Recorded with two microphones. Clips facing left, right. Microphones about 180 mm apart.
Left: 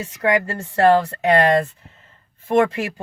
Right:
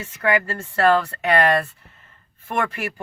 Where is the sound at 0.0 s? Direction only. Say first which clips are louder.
Left 2 dB; 25° left (ahead or behind).